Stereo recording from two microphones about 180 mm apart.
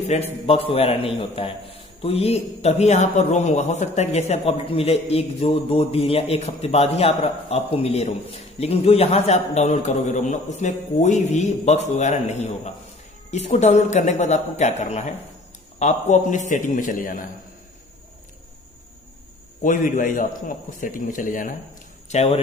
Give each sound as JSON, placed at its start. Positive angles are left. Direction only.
{"t": 0.5, "sound": "a man's voice", "side_deg": 30}
{"t": 19.6, "sound": "a man's voice", "side_deg": 45}
{"t": 22.1, "sound": "a man's voice", "side_deg": 35}